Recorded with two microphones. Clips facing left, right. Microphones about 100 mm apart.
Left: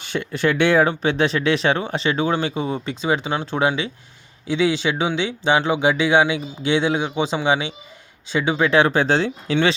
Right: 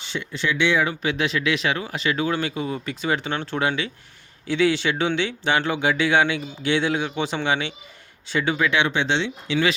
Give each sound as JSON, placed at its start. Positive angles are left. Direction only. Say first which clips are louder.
{"t": 0.0, "sound": "speech", "louder": "left 6 dB", "side_deg": 50}
{"t": 0.9, "sound": "speech", "louder": "left 5 dB", "side_deg": 35}
{"t": 8.7, "sound": "speech", "louder": "left 5 dB", "side_deg": 40}